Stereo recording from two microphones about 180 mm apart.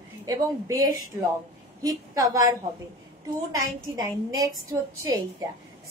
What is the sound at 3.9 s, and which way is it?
A woman's voice, 20° right (ahead or behind).